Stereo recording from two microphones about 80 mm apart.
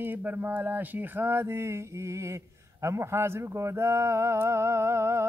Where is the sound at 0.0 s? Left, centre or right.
Right.